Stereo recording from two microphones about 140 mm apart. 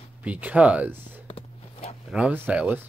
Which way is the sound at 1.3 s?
45° left (ahead or behind).